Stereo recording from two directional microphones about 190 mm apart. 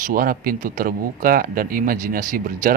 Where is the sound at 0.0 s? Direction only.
50° right (ahead or behind).